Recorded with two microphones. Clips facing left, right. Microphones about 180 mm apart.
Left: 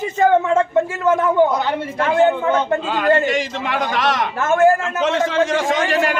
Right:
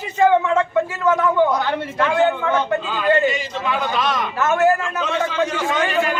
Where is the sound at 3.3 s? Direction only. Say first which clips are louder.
Left 2 dB; 90° left.